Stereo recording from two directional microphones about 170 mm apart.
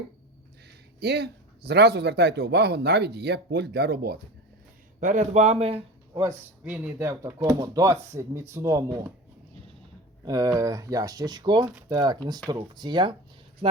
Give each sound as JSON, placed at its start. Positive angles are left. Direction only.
{"t": 0.9, "sound": "a man's voice", "side_deg": -70}
{"t": 4.9, "sound": "speech", "side_deg": -45}
{"t": 6.1, "sound": "speech", "side_deg": -10}
{"t": 10.2, "sound": "speech", "side_deg": -20}